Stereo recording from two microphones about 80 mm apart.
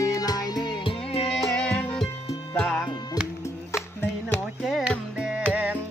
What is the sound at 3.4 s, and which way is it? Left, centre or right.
Music, left.